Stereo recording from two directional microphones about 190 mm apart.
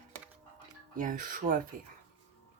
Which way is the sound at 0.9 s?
45° right (ahead or behind).